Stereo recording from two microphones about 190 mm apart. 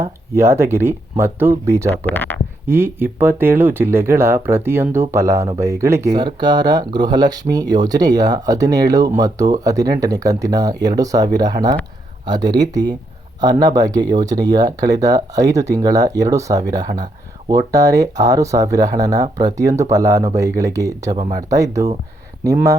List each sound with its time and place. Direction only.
0.0 s speech: 15° right (ahead or behind)
1.9 s speech: 10° left (ahead or behind)
2.6 s speech: 10° right (ahead or behind)